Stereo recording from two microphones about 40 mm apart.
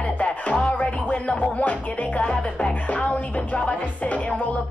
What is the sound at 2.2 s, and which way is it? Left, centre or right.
Music, left.